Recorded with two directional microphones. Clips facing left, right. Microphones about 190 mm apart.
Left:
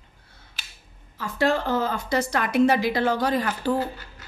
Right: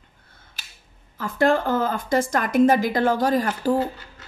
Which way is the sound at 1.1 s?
50° right (ahead or behind).